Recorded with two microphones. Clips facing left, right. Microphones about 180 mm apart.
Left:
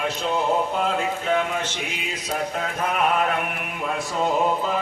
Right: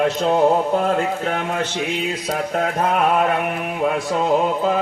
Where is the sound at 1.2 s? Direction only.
75° right (ahead or behind).